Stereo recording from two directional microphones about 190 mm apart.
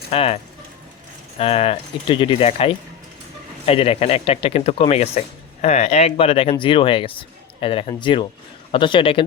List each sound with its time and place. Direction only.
0.1 s speech: 30° left (ahead or behind)
1.4 s speech: 30° left (ahead or behind)